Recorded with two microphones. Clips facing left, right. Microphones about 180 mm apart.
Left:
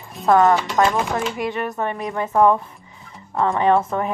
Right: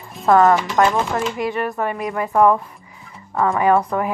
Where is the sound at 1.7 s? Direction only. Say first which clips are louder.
Right 2 dB; 20° left (ahead or behind).